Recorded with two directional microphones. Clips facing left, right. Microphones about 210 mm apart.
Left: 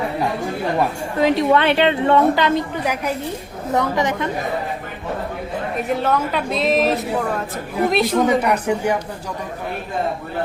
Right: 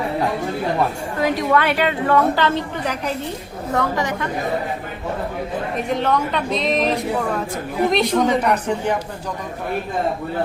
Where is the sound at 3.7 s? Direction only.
20° left (ahead or behind).